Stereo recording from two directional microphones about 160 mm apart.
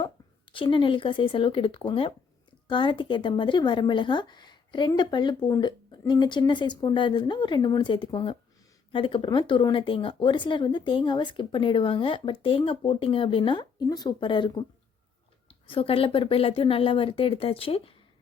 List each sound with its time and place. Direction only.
0.5 s speech: 30° left (ahead or behind)
15.6 s speech: 35° left (ahead or behind)